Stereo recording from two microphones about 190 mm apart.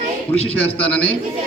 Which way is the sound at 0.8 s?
5° left (ahead or behind).